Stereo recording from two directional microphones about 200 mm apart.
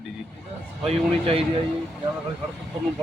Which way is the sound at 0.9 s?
30° right (ahead or behind).